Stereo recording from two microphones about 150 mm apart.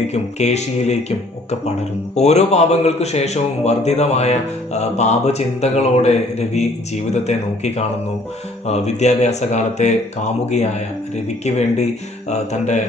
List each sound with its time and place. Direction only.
0.1 s a man's voice: 50° left (ahead or behind)
2.1 s a man's voice: 45° left (ahead or behind)
11.4 s a man's voice: 50° left (ahead or behind)